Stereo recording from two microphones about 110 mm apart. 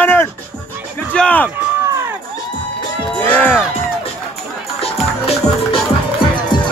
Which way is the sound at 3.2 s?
15° left (ahead or behind).